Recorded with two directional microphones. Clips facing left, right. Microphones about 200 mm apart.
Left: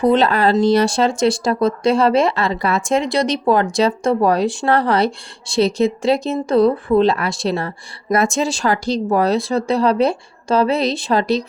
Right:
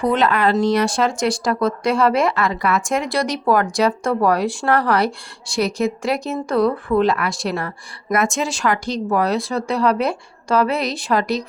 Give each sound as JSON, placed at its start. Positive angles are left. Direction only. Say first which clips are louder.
{"t": 0.0, "sound": "speech", "louder": "left 3 dB", "side_deg": 30}